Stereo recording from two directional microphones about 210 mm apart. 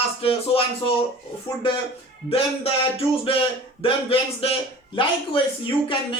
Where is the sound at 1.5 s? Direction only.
25° left (ahead or behind).